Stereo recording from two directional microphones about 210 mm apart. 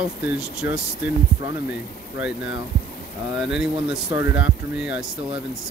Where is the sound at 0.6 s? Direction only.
45° left (ahead or behind).